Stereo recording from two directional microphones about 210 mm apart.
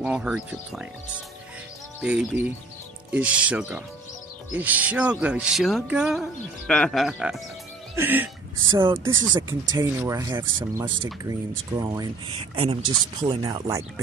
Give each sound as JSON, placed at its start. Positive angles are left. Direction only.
{"t": 0.0, "sound": "music", "side_deg": -5}
{"t": 2.0, "sound": "music", "side_deg": -5}
{"t": 7.9, "sound": "speech", "side_deg": -10}
{"t": 8.6, "sound": "speech", "side_deg": -20}